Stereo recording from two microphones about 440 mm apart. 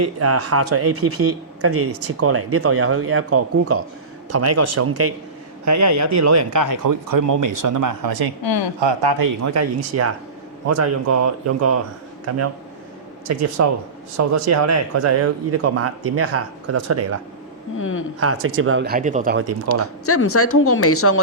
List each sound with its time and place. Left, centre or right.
0.0 s speech: right
8.4 s speech: left
8.8 s speech: right
17.7 s speech: left
18.4 s speech: right
19.8 s speech: left